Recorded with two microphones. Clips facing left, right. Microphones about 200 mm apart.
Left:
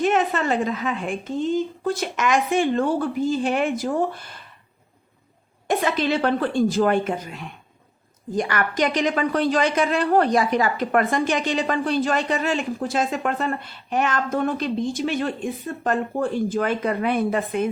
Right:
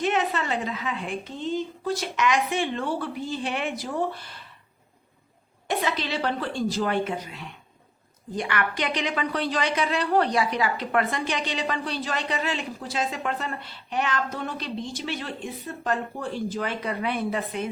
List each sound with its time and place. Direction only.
0.0 s a woman's voice: 45° left (ahead or behind)
5.6 s a woman's voice: 50° left (ahead or behind)